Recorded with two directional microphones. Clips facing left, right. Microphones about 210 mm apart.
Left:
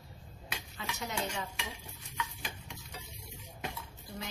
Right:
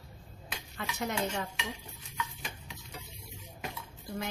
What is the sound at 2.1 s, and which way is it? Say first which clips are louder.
Stir: right 1 dB; centre (ahead or behind).